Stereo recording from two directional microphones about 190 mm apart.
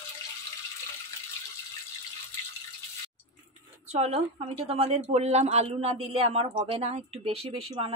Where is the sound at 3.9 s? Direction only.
35° right (ahead or behind).